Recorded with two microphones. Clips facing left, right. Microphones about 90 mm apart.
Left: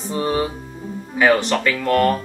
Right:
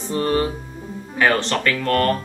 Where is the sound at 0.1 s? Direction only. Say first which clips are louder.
Right 1 dB; 10° left (ahead or behind).